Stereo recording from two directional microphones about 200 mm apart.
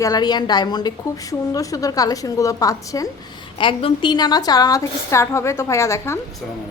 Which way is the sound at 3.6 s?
25° left (ahead or behind).